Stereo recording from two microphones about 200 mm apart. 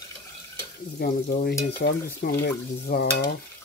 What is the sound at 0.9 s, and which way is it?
Speech, 50° left (ahead or behind).